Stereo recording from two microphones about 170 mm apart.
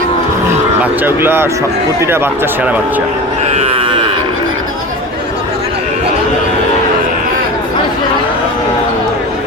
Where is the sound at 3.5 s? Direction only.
35° right (ahead or behind).